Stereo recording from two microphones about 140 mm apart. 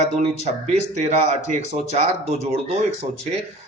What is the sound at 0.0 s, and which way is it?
Speech, 55° right (ahead or behind).